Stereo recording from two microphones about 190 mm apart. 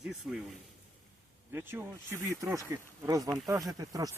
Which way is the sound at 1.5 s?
10° right (ahead or behind).